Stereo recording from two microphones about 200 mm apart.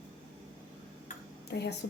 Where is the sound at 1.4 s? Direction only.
55° left (ahead or behind).